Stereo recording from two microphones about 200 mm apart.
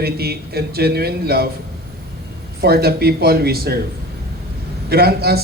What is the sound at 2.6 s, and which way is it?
Speech, 50° right (ahead or behind).